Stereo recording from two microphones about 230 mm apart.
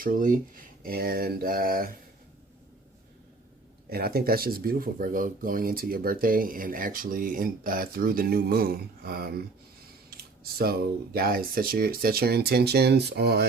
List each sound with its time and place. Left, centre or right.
0.0 s speech: right
3.8 s speech: right